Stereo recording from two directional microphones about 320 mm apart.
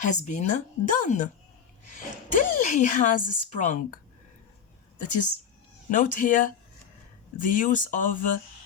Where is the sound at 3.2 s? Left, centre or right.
Left.